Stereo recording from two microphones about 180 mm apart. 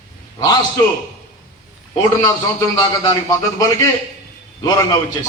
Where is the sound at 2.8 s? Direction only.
20° left (ahead or behind).